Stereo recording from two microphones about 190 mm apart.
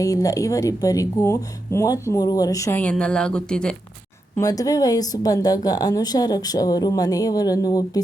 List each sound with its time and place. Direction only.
0.0 s speech: 15° left (ahead or behind)
4.4 s speech: 20° left (ahead or behind)